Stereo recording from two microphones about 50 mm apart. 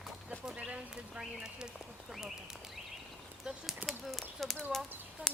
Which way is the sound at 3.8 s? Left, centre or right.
Centre.